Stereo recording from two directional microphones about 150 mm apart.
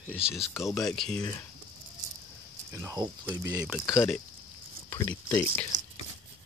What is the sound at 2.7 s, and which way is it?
Speech, 20° right (ahead or behind).